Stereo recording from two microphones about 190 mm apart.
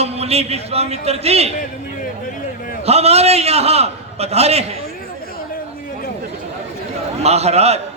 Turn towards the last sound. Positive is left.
turn(degrees=-35)  # may be behind; listen again after turning